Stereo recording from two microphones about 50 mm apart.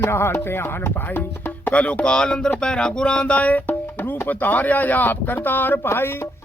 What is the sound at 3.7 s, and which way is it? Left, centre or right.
Speech, left.